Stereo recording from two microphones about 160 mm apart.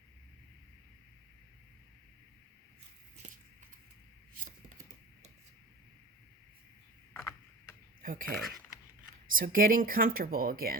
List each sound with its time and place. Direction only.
8.0 s speech: 60° right (ahead or behind)
8.4 s speech: centre (ahead or behind)
9.3 s speech: 60° right (ahead or behind)